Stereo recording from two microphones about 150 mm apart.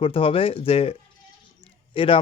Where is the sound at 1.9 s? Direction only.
35° left (ahead or behind).